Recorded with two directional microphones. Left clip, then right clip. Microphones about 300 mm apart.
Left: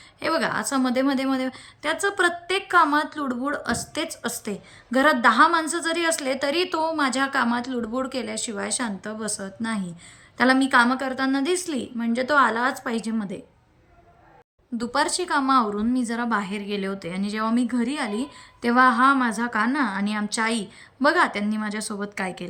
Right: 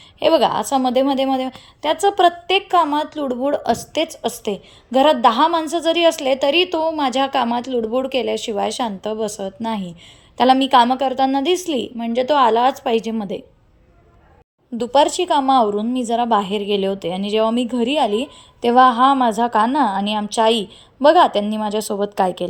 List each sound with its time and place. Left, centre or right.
0.2 s a woman's voice: centre
14.8 s a woman's voice: centre
22.1 s a woman's voice: right